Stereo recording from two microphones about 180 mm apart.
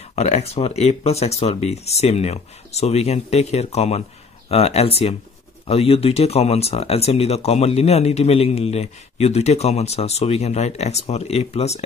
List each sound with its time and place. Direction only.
0.1 s speech: 35° left (ahead or behind)